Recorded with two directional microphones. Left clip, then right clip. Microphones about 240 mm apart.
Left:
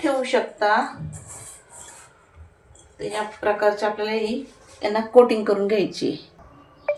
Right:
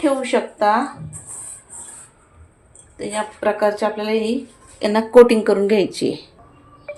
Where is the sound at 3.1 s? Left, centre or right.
Right.